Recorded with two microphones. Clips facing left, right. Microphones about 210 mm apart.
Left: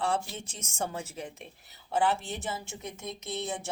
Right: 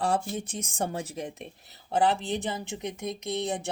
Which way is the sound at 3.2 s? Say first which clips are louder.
Right 4 dB; 60° right (ahead or behind).